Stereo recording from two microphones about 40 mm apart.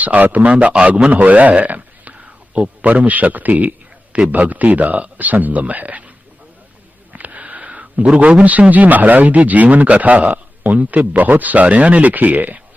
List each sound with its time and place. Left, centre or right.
0.0 s speech: right
0.4 s a man's voice: right
1.1 s a man's voice: right
2.1 s whispering: right
2.8 s a man's voice: right
7.1 s a sound: right
8.7 s a man's voice: right